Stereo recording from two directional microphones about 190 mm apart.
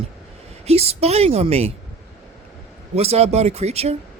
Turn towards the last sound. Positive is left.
turn(degrees=-35)  # may be behind; listen again after turning